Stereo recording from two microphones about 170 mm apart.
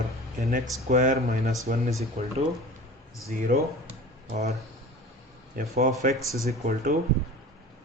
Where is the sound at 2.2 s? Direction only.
40° right (ahead or behind).